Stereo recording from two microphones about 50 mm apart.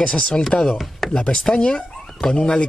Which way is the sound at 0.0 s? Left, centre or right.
Left.